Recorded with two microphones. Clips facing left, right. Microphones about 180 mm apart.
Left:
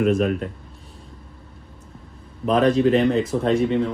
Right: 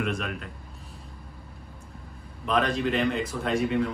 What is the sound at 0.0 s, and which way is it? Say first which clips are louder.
Speech: left 11 dB; 40° left (ahead or behind).